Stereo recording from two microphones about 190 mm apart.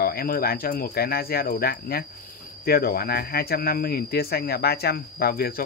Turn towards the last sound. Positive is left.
turn(degrees=55)  # may be behind; listen again after turning